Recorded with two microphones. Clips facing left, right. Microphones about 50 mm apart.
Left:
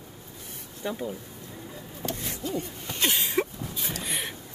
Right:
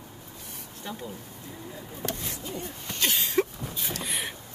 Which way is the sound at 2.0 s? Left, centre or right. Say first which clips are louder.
Even; right.